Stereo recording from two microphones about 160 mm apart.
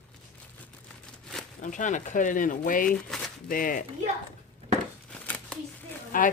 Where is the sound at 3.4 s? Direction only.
60° left (ahead or behind).